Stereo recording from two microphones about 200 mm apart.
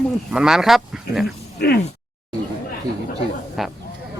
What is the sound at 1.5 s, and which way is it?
Speech, 55° left (ahead or behind).